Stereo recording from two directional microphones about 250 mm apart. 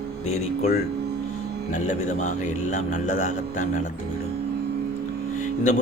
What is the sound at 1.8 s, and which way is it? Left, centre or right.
Speech, left.